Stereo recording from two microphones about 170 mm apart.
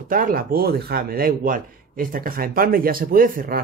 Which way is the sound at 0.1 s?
55° right (ahead or behind).